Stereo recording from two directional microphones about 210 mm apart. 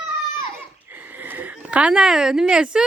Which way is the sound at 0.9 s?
10° right (ahead or behind).